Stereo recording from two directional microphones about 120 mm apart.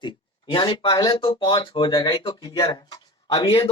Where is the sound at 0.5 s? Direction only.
45° left (ahead or behind).